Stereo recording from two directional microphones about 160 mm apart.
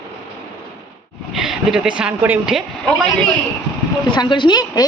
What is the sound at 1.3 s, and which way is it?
A woman's voice, 5° right (ahead or behind).